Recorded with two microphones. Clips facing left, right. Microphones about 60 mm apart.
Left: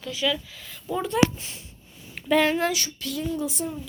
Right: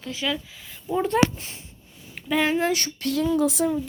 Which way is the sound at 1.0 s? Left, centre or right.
Right.